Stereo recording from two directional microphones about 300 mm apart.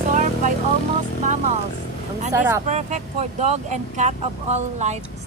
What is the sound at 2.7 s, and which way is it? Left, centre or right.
Speech, right.